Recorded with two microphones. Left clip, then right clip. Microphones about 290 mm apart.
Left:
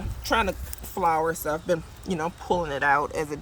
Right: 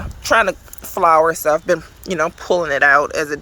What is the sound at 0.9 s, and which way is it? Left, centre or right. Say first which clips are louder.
Speech: right 11 dB; centre.